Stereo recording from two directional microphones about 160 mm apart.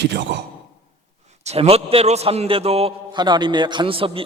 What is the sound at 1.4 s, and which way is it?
A man's voice, 40° right (ahead or behind).